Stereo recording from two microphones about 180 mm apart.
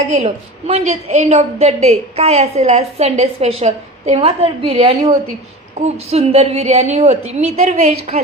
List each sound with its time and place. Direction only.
0.1 s a woman's voice: 35° right (ahead or behind)